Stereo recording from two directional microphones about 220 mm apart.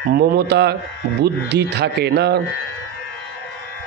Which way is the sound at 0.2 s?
50° right (ahead or behind).